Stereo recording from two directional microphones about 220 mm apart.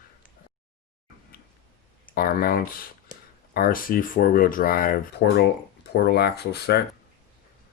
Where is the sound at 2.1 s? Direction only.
40° left (ahead or behind).